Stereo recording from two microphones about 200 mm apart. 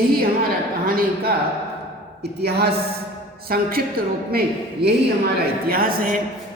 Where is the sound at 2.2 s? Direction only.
55° right (ahead or behind).